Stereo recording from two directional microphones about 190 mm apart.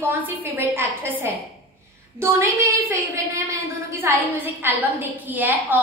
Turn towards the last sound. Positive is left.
turn(degrees=-10)  # may be behind; listen again after turning